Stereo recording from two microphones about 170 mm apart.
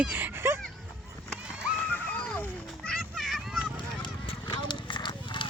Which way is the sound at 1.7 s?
10° left (ahead or behind).